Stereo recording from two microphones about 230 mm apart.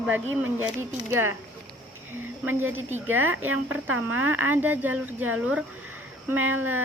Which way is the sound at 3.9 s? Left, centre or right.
Right.